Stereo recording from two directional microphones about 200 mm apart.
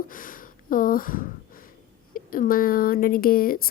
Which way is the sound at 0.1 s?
45° left (ahead or behind).